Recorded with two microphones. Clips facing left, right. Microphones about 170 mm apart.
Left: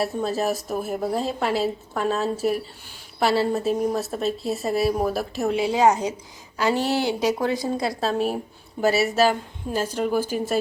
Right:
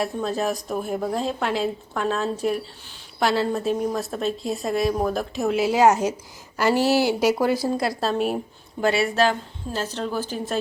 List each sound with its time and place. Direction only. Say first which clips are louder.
0.0 s a woman's voice: left 1 dB; 5° left (ahead or behind)